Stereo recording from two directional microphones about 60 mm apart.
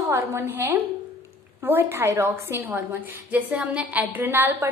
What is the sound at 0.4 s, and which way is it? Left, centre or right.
A woman's voice, right.